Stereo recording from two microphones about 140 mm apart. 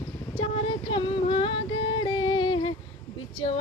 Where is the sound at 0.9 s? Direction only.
40° left (ahead or behind).